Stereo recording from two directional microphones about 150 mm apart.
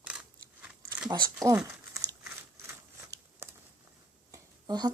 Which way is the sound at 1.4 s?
20° right (ahead or behind).